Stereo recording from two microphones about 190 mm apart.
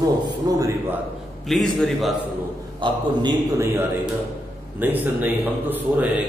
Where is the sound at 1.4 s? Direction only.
Centre (ahead or behind).